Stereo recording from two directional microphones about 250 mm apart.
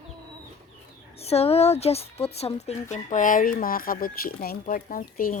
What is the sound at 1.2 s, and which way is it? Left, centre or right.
Speech, left.